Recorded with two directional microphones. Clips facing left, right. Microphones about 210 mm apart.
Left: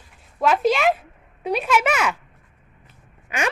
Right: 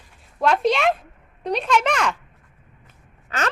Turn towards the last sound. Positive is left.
turn(degrees=10)  # may be behind; listen again after turning